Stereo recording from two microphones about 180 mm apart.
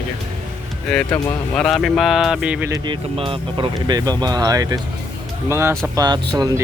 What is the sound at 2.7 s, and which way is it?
Speech, 30° right (ahead or behind).